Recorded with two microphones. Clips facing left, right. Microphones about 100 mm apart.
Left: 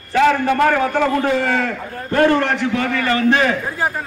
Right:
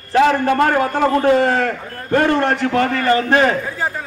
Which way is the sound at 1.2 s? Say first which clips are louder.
Right 4 dB; 45° right (ahead or behind).